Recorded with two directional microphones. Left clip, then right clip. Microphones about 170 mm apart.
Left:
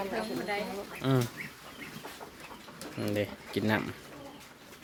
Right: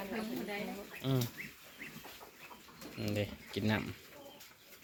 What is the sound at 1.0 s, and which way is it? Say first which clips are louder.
Speech: left 7 dB; 35° left (ahead or behind).